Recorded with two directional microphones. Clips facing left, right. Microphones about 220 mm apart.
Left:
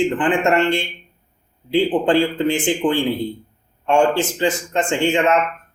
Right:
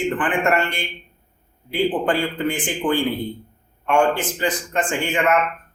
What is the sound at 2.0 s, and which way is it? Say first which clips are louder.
Speech: left 5 dB; 25° left (ahead or behind).